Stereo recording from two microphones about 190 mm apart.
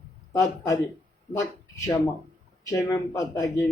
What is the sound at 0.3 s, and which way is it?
Speech, 20° left (ahead or behind).